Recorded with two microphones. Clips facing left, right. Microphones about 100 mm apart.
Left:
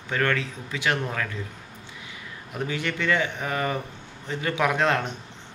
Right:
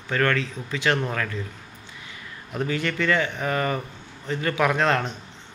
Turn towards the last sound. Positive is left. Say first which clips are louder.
# right 1 dB
turn(degrees=15)  # may be behind; listen again after turning